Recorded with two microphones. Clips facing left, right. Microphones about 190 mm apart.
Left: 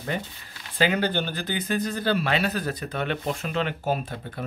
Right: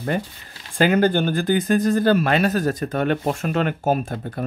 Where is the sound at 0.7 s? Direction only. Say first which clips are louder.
Right 7 dB; 45° right (ahead or behind).